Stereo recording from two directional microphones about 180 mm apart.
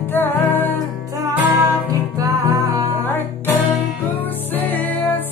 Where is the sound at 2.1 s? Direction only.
20° right (ahead or behind).